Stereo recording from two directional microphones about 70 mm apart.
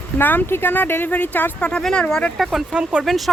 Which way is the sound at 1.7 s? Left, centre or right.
Centre.